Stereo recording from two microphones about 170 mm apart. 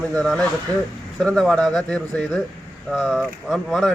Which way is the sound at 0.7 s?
20° right (ahead or behind).